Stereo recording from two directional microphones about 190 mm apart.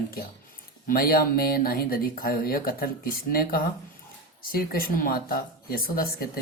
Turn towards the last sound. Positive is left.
turn(degrees=50)  # may be behind; listen again after turning